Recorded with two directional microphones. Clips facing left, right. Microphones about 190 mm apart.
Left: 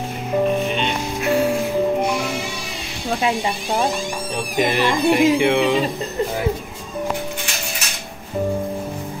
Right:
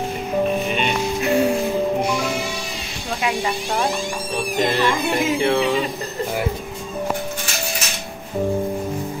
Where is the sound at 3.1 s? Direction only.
30° left (ahead or behind).